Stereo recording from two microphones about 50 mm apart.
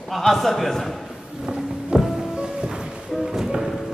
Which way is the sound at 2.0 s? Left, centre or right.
Centre.